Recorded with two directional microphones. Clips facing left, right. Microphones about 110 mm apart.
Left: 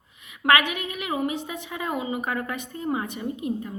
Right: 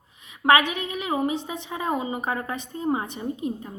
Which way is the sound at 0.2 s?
30° right (ahead or behind).